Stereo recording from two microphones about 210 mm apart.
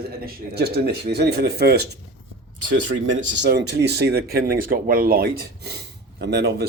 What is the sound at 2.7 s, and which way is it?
Speech, 60° right (ahead or behind).